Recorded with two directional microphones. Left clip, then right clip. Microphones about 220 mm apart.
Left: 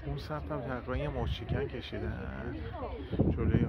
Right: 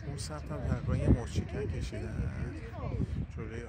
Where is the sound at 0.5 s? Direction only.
5° right (ahead or behind).